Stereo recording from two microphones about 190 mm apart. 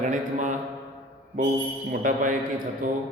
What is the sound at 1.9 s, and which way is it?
A man's voice, 45° right (ahead or behind).